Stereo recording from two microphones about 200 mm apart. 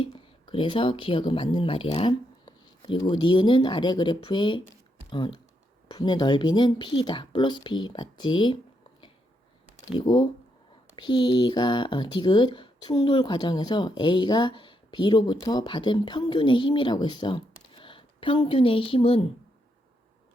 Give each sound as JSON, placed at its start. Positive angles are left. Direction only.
{"t": 0.0, "sound": "speech", "side_deg": 25}
{"t": 9.9, "sound": "speech", "side_deg": 20}